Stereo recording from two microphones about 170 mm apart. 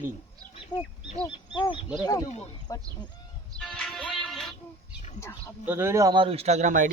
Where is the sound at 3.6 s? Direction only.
5° left (ahead or behind).